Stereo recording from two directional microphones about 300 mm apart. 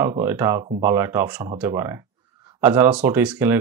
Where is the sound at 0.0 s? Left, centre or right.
Centre.